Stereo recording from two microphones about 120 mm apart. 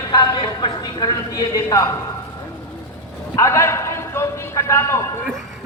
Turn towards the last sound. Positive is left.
turn(degrees=25)  # may be behind; listen again after turning